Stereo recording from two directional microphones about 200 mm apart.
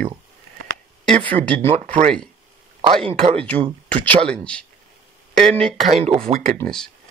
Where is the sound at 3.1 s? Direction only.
30° right (ahead or behind).